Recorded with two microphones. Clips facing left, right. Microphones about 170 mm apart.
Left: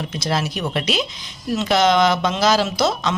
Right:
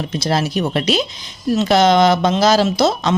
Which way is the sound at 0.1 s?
30° right (ahead or behind).